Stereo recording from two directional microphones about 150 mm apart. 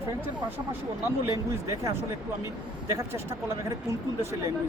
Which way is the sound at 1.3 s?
20° right (ahead or behind).